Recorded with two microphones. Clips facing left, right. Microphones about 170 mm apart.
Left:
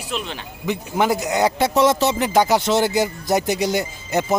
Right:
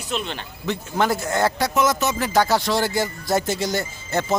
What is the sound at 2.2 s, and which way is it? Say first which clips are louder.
Speech: left 1 dB; 15° left (ahead or behind).